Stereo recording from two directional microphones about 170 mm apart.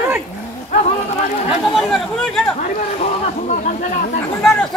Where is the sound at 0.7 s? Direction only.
45° left (ahead or behind).